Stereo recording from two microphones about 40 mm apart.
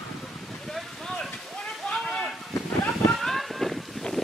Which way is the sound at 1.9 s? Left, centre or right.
Centre.